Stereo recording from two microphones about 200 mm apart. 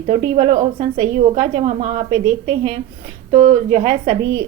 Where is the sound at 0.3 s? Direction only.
35° right (ahead or behind).